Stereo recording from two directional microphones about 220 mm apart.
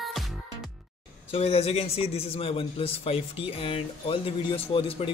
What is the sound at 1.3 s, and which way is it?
A man's voice, 25° left (ahead or behind).